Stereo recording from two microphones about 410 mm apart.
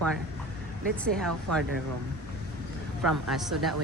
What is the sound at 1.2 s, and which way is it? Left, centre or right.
Speech, centre.